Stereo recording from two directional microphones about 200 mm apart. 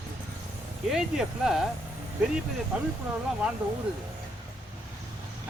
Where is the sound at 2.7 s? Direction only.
5° right (ahead or behind).